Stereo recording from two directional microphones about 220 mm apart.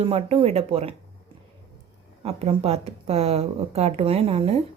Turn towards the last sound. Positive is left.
turn(degrees=-25)  # may be behind; listen again after turning